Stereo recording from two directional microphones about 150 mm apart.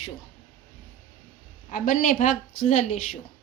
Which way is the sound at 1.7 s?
60° left (ahead or behind).